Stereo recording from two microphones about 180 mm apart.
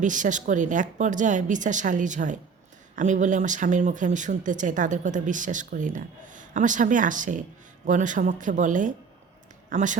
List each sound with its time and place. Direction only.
0.0 s speech: 45° right (ahead or behind)